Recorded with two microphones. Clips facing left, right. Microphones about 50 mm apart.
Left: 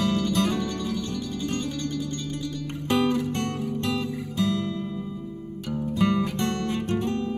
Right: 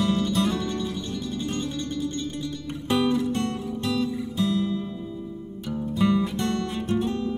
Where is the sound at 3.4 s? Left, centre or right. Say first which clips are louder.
Even; left.